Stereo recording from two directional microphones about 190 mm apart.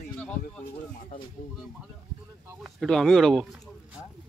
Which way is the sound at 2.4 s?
10° right (ahead or behind).